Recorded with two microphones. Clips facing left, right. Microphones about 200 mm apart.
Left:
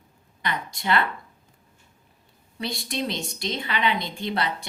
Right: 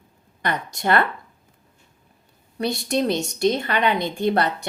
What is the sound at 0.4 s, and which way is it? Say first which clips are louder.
Speech: right 4 dB; 50° right (ahead or behind).